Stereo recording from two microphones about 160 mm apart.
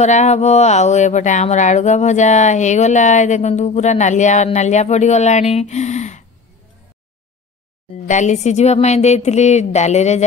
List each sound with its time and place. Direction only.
0.0 s speech: 45° left (ahead or behind)
7.9 s speech: 45° left (ahead or behind)